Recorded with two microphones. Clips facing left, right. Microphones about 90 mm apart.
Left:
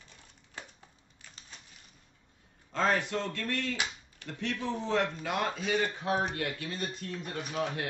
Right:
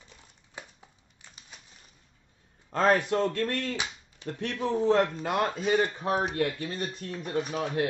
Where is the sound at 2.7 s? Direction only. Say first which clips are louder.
Right 5 dB; 45° right (ahead or behind).